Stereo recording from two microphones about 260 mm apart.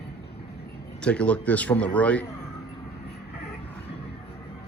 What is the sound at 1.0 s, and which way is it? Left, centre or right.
A man's voice, centre.